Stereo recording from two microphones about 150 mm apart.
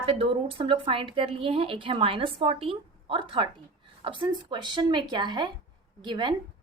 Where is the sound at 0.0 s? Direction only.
40° right (ahead or behind).